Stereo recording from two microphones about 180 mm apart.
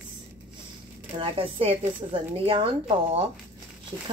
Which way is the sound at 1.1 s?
30° right (ahead or behind).